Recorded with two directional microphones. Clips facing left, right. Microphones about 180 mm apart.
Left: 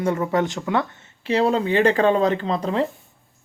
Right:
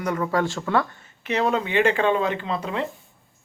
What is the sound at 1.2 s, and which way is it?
Speech, 30° left (ahead or behind).